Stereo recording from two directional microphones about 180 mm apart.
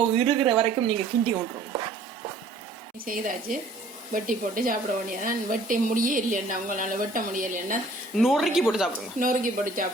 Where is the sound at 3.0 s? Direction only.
50° right (ahead or behind).